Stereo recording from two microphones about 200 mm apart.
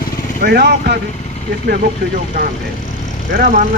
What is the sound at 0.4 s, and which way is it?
Speech, 50° right (ahead or behind).